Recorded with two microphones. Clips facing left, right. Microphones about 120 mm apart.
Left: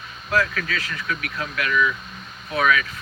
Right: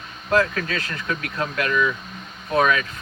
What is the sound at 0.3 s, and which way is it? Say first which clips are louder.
Speech: right 2 dB; 20° right (ahead or behind).